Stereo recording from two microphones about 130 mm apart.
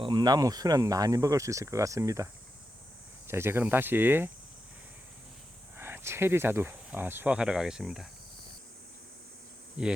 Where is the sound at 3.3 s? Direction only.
20° right (ahead or behind).